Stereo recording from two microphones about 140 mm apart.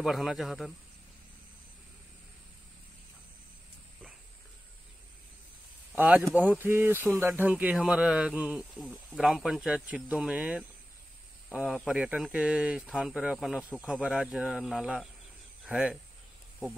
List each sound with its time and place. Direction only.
0.0 s speech: centre (ahead or behind)
5.9 s speech: 10° right (ahead or behind)